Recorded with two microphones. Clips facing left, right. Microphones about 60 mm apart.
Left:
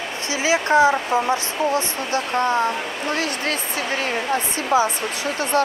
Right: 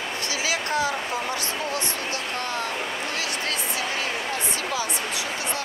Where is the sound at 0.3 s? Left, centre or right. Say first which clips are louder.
Left 9 dB; left.